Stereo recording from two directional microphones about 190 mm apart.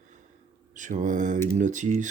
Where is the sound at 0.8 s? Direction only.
40° right (ahead or behind).